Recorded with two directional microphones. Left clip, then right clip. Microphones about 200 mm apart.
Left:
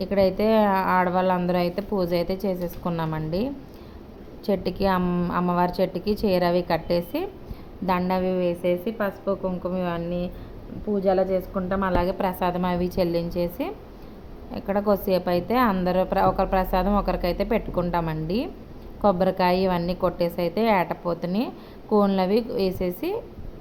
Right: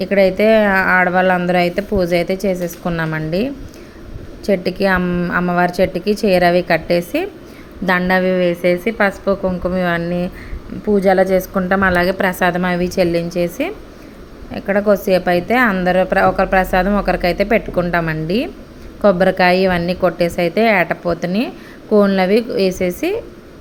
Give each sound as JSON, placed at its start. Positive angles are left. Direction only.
{"t": 0.0, "sound": "a woman's voice", "side_deg": -15}
{"t": 10.9, "sound": "a woman's voice", "side_deg": -40}